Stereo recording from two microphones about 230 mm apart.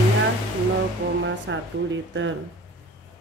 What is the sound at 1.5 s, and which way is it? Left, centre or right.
Speech, right.